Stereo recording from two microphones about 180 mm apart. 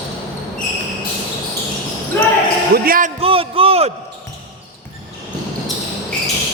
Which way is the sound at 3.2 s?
30° right (ahead or behind).